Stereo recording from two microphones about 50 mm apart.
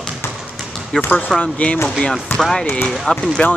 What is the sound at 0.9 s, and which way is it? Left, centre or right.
Speech, left.